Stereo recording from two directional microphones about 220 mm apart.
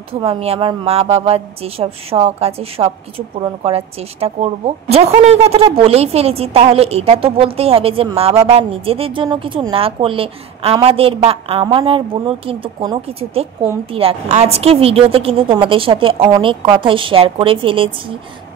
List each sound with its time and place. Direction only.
0.1 s a woman's voice: 25° right (ahead or behind)